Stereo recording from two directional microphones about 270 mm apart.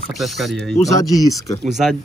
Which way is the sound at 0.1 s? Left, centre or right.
Centre.